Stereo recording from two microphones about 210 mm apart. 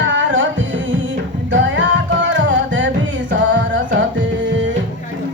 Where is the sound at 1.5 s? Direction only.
60° right (ahead or behind).